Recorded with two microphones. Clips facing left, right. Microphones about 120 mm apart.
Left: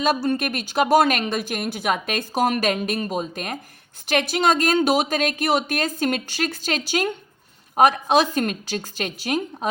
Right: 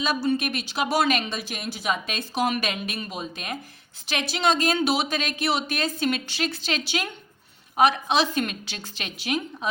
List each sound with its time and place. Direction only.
0.0 s a woman's voice: 45° left (ahead or behind)